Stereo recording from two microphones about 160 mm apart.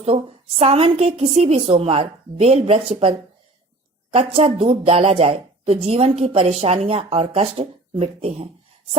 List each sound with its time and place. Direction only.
0.0 s a woman's voice: 40° right (ahead or behind)